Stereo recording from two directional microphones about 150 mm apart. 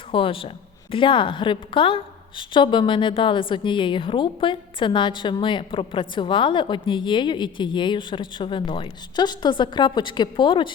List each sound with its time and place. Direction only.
0.1 s a woman's voice: 35° left (ahead or behind)